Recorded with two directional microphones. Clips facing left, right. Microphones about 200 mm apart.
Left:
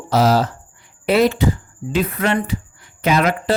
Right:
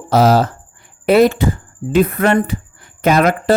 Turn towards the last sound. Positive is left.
turn(degrees=-45)  # may be behind; listen again after turning